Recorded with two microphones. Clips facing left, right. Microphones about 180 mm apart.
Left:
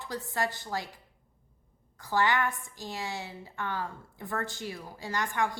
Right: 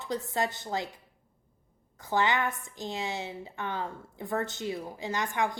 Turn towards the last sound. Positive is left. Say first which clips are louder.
# right 1 dB
turn(degrees=-20)  # may be behind; listen again after turning